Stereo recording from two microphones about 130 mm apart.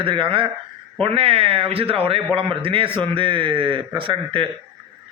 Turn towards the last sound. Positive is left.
turn(degrees=-40)  # may be behind; listen again after turning